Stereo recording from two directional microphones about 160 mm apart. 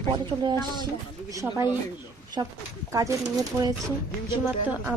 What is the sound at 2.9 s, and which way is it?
Speech, 20° right (ahead or behind).